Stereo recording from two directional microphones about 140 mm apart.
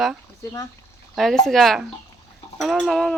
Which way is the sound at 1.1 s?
5° left (ahead or behind).